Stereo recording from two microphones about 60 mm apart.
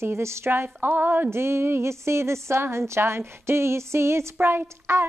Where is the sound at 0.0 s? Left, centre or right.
Right.